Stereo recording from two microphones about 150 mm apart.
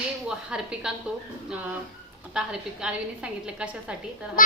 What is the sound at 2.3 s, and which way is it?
A woman's voice, 5° right (ahead or behind).